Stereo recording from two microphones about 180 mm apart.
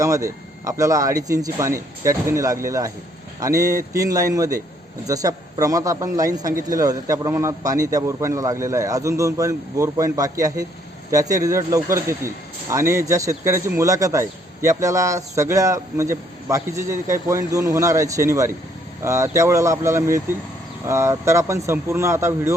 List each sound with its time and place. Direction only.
0.0 s a man's voice: 20° right (ahead or behind)